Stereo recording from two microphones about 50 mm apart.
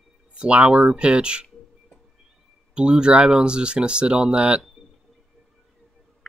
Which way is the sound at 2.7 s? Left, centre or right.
Centre.